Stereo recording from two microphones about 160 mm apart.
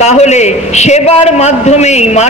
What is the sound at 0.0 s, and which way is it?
A man's voice, 45° left (ahead or behind).